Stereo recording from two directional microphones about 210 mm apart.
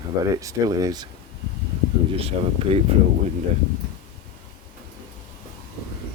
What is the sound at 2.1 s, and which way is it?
Speech, 25° right (ahead or behind).